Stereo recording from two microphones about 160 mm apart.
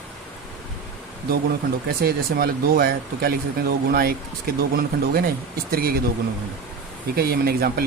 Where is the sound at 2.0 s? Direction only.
70° right (ahead or behind).